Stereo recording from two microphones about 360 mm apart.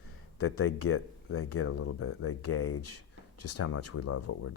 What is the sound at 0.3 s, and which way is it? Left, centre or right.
Speech, left.